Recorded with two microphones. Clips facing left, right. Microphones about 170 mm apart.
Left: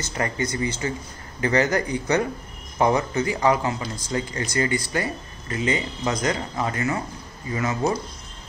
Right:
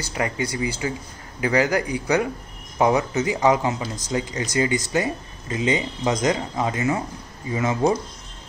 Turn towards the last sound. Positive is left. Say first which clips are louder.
# right 3 dB
turn(degrees=-20)  # may be behind; listen again after turning